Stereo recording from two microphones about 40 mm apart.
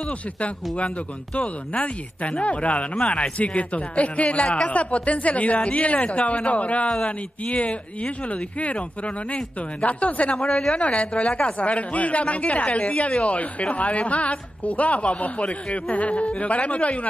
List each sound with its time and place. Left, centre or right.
0.7 s a woman's voice: left